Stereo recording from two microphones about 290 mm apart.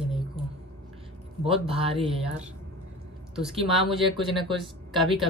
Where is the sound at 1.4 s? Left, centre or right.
Centre.